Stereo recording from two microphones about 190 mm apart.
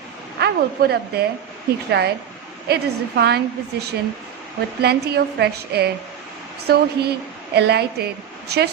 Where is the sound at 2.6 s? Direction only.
60° right (ahead or behind).